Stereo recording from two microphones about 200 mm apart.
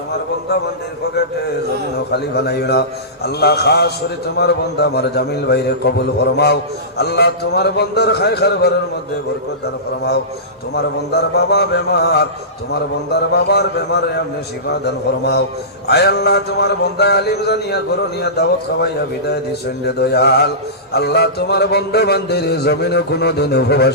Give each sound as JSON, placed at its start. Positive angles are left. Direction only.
{"t": 2.1, "sound": "a man's voice", "side_deg": 55}
{"t": 10.8, "sound": "a man's voice", "side_deg": 55}
{"t": 20.0, "sound": "a man's voice", "side_deg": 55}